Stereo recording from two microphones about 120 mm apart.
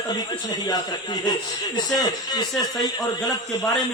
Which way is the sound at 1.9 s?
35° left (ahead or behind).